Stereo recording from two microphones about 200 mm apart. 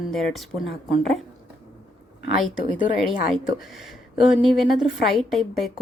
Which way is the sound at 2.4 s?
Centre (ahead or behind).